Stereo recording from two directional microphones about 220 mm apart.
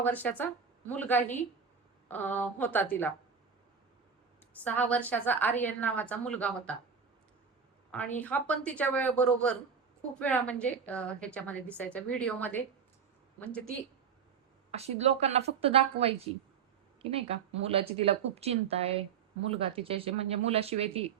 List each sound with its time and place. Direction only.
0.0 s a woman's voice: 5° left (ahead or behind)
4.5 s a woman's voice: 5° left (ahead or behind)
7.9 s a woman's voice: 5° left (ahead or behind)
14.7 s speech: 30° right (ahead or behind)